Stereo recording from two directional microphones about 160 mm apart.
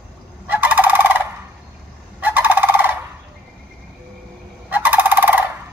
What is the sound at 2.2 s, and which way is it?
Fowl, 10° right (ahead or behind).